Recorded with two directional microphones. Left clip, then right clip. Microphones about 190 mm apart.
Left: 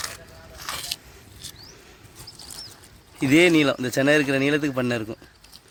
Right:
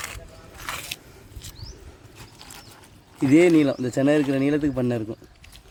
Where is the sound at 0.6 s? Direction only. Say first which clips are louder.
Left 1 dB; 40° right (ahead or behind).